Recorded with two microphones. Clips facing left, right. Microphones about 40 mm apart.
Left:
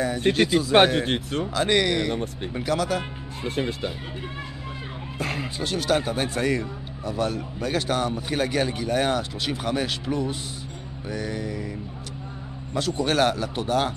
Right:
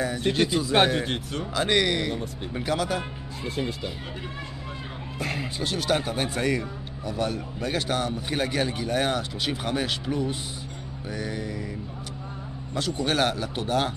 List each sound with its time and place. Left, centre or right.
0.3 s speech: centre; by 1.4 s left
1.5 s speech: centre
3.4 s speech: left
5.2 s speech: centre
12.7 s speech: centre